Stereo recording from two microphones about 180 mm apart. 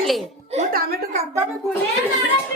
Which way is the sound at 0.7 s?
55° right (ahead or behind).